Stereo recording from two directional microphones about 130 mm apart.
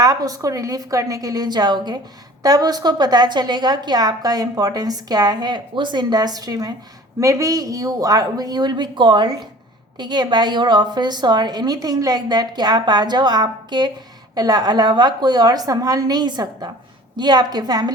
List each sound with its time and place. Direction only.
0.0 s a woman's voice: 30° right (ahead or behind)